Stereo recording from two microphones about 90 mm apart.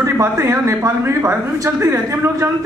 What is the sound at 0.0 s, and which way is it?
A man's voice, 35° right (ahead or behind).